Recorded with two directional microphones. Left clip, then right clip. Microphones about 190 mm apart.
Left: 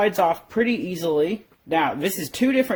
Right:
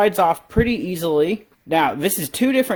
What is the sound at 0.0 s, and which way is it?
Speech, 25° right (ahead or behind).